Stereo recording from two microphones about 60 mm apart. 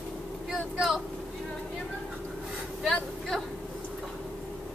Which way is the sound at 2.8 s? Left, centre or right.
Centre.